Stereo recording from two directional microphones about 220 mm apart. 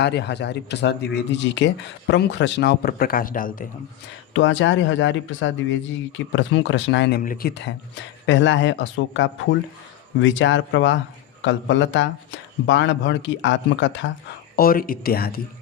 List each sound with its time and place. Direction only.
0.0 s speech: 50° left (ahead or behind)
4.4 s speech: 60° left (ahead or behind)
7.2 s speech: 40° left (ahead or behind); by 14.1 s 55° left (ahead or behind)
14.5 s speech: 40° left (ahead or behind)